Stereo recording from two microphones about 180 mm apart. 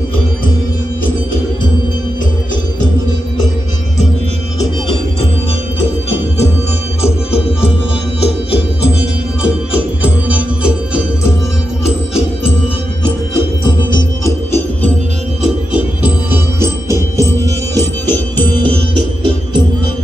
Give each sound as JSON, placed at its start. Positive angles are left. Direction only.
{"t": 13.7, "sound": "music", "side_deg": 20}
{"t": 15.4, "sound": "music", "side_deg": -10}
{"t": 18.0, "sound": "music", "side_deg": 10}